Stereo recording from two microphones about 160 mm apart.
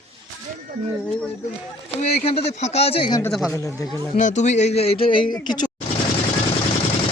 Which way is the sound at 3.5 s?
20° left (ahead or behind).